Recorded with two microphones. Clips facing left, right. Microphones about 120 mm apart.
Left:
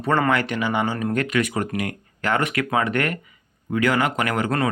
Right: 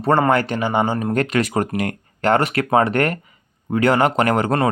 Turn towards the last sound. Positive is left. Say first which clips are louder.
# right 5 dB
turn(degrees=-35)  # may be behind; listen again after turning